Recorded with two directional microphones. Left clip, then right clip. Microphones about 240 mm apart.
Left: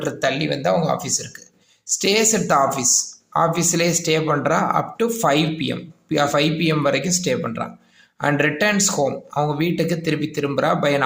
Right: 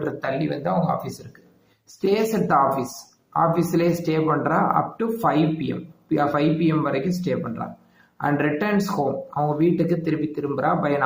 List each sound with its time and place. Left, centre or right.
0.0 s speech: left